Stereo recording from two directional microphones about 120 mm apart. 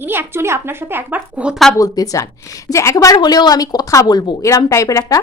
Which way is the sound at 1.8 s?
30° left (ahead or behind).